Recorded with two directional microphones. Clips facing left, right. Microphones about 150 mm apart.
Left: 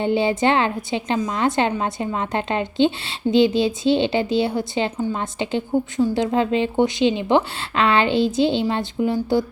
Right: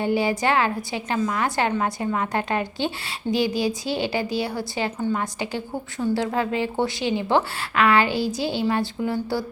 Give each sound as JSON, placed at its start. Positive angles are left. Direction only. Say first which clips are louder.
{"t": 0.0, "sound": "a woman's voice", "louder": "left 3 dB", "side_deg": 25}